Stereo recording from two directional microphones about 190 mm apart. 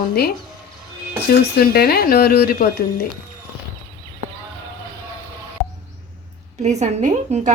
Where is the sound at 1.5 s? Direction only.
55° left (ahead or behind).